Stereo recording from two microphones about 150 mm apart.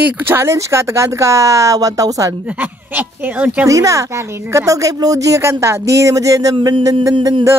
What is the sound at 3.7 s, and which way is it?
A woman's voice, 20° right (ahead or behind).